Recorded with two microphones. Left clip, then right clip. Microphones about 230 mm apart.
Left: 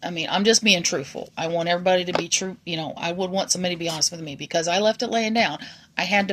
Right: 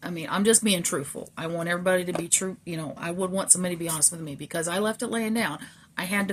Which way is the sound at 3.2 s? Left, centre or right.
Centre.